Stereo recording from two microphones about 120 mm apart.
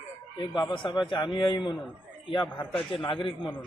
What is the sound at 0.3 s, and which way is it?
A man's voice, 40° left (ahead or behind).